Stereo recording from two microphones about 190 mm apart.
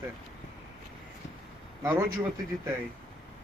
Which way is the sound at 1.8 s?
15° right (ahead or behind).